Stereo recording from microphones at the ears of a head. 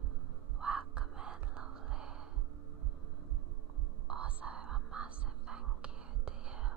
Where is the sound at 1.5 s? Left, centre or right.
Right.